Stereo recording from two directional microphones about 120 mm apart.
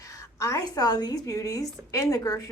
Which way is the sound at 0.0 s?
25° left (ahead or behind).